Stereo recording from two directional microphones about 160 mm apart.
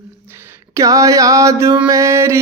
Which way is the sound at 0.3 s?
20° right (ahead or behind).